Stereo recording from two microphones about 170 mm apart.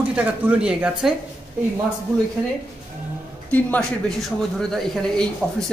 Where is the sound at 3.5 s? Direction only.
5° left (ahead or behind).